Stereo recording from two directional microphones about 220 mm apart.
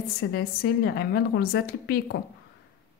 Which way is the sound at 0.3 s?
45° left (ahead or behind).